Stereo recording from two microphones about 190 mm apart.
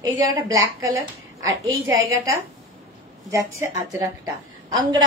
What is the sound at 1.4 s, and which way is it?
A child's voice, 15° right (ahead or behind).